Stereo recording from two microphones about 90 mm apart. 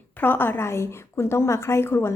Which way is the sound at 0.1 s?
20° left (ahead or behind).